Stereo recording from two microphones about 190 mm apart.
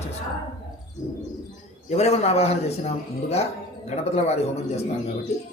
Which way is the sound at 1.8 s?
35° left (ahead or behind).